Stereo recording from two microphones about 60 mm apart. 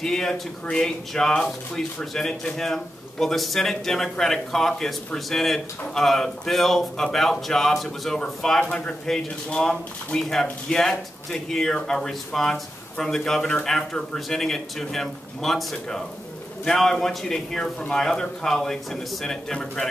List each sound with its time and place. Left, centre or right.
0.0 s speech: centre